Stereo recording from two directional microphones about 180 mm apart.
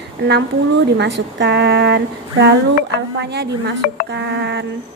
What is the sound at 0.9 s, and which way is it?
A woman's voice, 70° right (ahead or behind).